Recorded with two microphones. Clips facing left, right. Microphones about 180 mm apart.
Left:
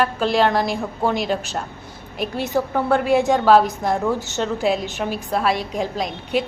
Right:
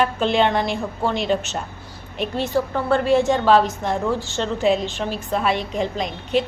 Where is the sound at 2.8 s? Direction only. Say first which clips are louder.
Right 1 dB; 10° left (ahead or behind).